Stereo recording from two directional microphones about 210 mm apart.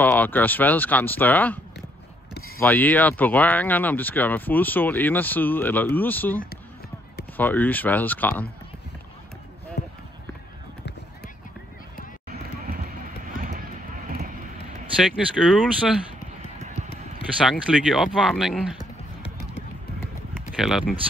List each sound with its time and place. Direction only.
0.0 s speech: 10° left (ahead or behind)
2.6 s speech: 10° left (ahead or behind)
9.8 s run: 50° left (ahead or behind)
15.1 s speech: centre (ahead or behind)
17.5 s speech: centre (ahead or behind)
20.5 s speech: centre (ahead or behind)